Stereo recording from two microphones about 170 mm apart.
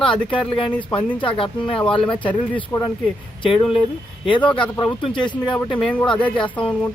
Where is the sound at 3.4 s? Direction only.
30° left (ahead or behind).